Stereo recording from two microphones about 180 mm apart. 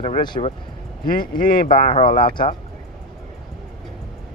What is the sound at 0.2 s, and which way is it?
Speech, 25° left (ahead or behind).